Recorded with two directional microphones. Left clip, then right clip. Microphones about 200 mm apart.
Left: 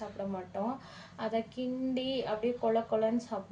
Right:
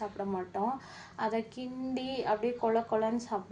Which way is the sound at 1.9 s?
20° right (ahead or behind).